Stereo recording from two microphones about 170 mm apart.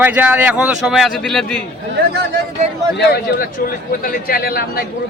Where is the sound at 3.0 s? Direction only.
65° left (ahead or behind).